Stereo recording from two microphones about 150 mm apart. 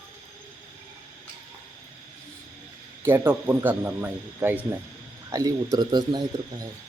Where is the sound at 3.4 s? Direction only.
15° right (ahead or behind); by 6.7 s 30° right (ahead or behind).